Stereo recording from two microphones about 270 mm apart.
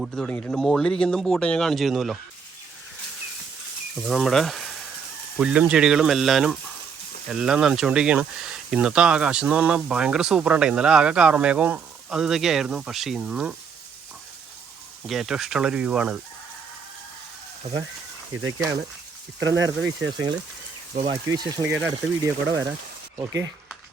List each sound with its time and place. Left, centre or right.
0.0 s speech: centre
4.0 s speech: centre
15.0 s speech: centre
19.4 s speech: right
20.9 s speech: right